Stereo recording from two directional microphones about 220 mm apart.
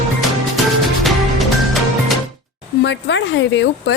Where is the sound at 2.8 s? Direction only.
55° left (ahead or behind).